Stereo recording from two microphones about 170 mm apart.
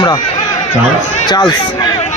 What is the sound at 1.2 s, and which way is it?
Speech, 25° left (ahead or behind).